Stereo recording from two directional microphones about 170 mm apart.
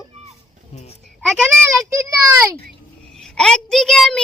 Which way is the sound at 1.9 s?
15° right (ahead or behind).